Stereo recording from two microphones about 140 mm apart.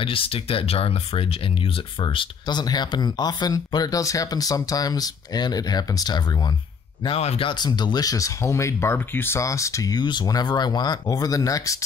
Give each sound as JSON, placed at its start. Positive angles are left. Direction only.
{"t": 0.0, "sound": "speech", "side_deg": 40}
{"t": 7.1, "sound": "speech", "side_deg": 45}